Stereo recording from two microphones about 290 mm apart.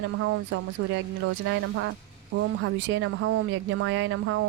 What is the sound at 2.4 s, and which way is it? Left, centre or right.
Speech, right.